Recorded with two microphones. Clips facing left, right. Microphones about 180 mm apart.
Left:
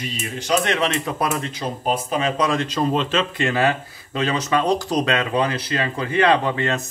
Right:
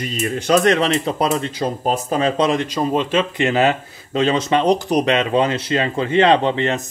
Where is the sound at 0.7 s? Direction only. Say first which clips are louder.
Right 4 dB; 30° right (ahead or behind).